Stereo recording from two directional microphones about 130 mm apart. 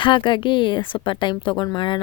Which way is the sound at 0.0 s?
40° left (ahead or behind).